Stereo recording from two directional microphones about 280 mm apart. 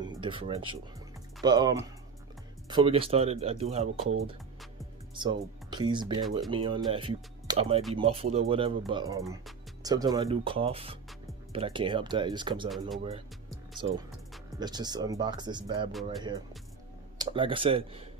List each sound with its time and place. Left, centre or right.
0.0 s a sound: centre
1.4 s speech: centre
5.1 s speech: centre
13.7 s speech: centre